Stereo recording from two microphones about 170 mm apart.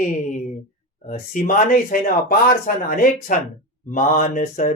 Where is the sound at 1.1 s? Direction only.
50° left (ahead or behind).